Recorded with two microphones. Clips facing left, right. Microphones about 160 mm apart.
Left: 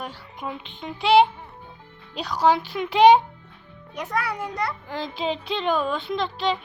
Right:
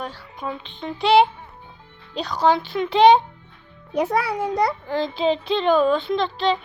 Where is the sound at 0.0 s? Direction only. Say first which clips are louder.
Right 3 dB; 15° left (ahead or behind).